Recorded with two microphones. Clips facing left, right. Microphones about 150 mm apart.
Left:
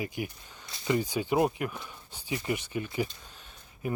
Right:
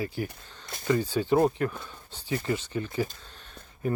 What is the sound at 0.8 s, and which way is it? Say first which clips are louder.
Speech: right 3 dB; 15° left (ahead or behind).